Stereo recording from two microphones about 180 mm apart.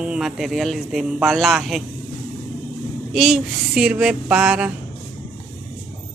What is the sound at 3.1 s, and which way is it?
Speech, centre (ahead or behind).